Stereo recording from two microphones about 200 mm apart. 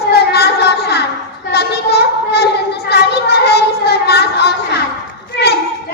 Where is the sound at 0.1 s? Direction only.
55° left (ahead or behind).